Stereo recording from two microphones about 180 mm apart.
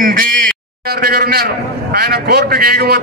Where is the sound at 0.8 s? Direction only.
60° right (ahead or behind).